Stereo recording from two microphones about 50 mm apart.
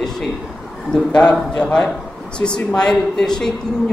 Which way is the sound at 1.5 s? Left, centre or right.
Left.